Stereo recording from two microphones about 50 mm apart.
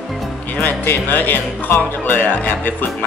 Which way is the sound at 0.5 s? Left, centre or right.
Left.